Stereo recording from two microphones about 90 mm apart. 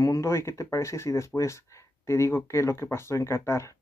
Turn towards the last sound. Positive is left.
turn(degrees=30)  # may be behind; listen again after turning